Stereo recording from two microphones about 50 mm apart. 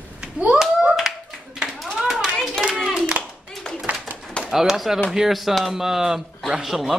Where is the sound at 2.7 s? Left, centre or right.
Centre.